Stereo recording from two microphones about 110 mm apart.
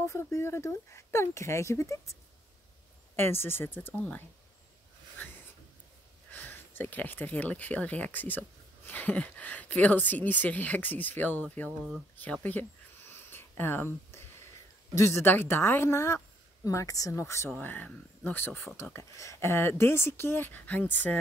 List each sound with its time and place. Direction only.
0.0 s speech: 25° left (ahead or behind)
3.2 s speech: 20° left (ahead or behind)
5.2 s a sound: 20° left (ahead or behind)
6.3 s speech: 15° left (ahead or behind)
12.2 s a sound: 15° left (ahead or behind)
15.0 s speech: 25° left (ahead or behind)
17.6 s speech: 15° left (ahead or behind)